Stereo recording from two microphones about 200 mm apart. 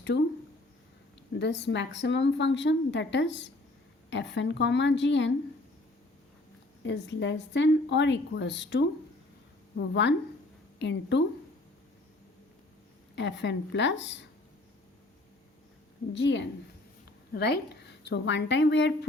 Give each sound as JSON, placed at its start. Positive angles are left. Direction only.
{"t": 1.3, "sound": "a woman's voice", "side_deg": 60}
{"t": 6.8, "sound": "a woman's voice", "side_deg": 65}
{"t": 13.1, "sound": "a woman's voice", "side_deg": 60}
{"t": 16.1, "sound": "a woman's voice", "side_deg": 65}